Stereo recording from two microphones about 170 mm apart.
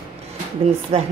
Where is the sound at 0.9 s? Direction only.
35° right (ahead or behind).